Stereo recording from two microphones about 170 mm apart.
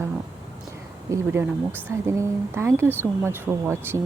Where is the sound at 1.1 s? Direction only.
15° right (ahead or behind).